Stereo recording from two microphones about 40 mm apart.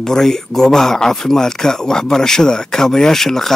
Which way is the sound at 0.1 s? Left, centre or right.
Centre.